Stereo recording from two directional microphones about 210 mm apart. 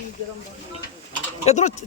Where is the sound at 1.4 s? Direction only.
35° left (ahead or behind).